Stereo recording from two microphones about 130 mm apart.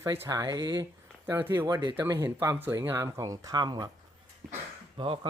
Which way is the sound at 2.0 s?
20° right (ahead or behind).